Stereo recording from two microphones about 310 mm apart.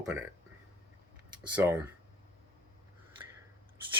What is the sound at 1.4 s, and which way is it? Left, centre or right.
Speech, centre.